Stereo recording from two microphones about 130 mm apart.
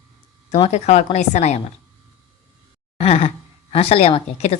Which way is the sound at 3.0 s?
50° left (ahead or behind).